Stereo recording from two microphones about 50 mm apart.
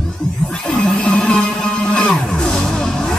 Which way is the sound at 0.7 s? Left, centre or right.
Left.